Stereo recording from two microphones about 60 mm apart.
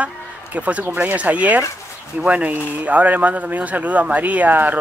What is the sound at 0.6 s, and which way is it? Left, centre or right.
Speech, right.